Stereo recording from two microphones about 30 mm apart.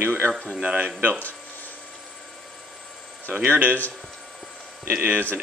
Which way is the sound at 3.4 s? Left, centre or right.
Right.